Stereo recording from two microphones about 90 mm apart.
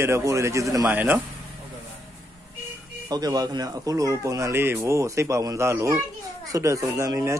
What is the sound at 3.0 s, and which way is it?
A man's voice, 45° right (ahead or behind).